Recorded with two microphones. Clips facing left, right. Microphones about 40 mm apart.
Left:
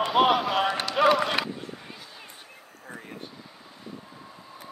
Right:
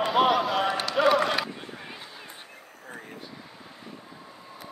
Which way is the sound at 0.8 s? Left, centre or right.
Centre.